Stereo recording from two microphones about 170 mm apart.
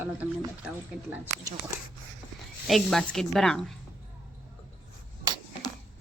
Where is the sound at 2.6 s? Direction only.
Centre (ahead or behind).